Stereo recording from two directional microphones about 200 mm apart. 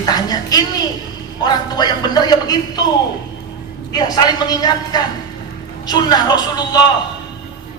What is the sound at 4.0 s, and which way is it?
A man's voice, 20° left (ahead or behind).